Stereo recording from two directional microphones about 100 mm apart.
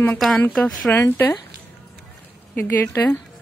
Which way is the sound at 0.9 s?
20° left (ahead or behind).